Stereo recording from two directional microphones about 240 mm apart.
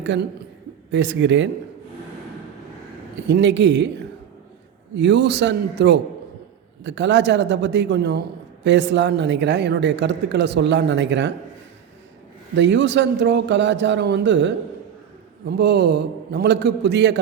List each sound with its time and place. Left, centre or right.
0.0 s a woman's voice: right
3.2 s a woman's voice: right
4.9 s a woman's voice: right
12.5 s a woman's voice: right